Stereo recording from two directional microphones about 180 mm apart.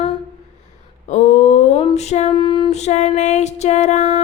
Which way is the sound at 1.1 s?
40° left (ahead or behind).